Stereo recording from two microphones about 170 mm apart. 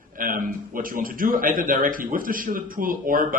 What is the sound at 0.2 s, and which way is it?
Speech, 55° right (ahead or behind).